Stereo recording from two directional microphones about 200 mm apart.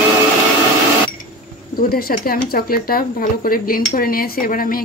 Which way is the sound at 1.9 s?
50° left (ahead or behind).